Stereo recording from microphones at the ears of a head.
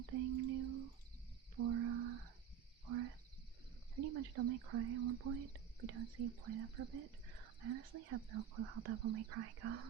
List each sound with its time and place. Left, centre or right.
0.0 s a sound: right
2.8 s frog: right
3.9 s speech: right